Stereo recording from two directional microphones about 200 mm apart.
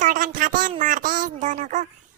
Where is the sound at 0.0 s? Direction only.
40° right (ahead or behind).